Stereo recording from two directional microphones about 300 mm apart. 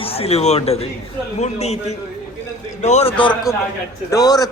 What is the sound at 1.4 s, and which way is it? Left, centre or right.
A man's voice, left.